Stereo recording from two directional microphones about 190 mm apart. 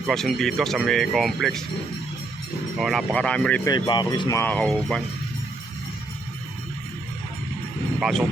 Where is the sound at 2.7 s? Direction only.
Centre (ahead or behind).